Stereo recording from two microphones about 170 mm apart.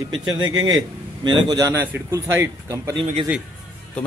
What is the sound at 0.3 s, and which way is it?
A man's voice, 25° right (ahead or behind).